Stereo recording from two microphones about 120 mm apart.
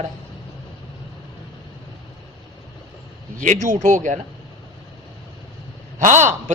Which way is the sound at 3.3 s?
90° right.